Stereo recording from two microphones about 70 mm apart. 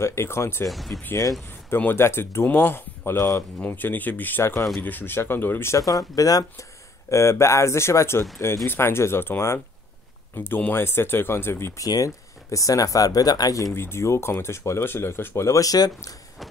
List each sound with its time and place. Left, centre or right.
0.0 s speech: left
0.7 s speech: centre
2.0 s speech: left
3.2 s speech: left
3.6 s speech: left
5.8 s speech: left
7.1 s speech: left
11.8 s speech: left
13.7 s speech: left